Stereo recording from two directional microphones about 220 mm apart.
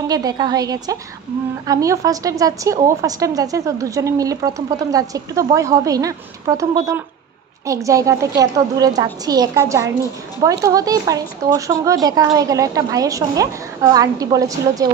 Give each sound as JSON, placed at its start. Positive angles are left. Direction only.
{"t": 0.1, "sound": "a woman's voice", "side_deg": -15}